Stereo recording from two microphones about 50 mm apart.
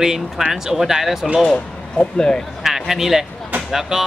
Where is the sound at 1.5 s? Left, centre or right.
Centre.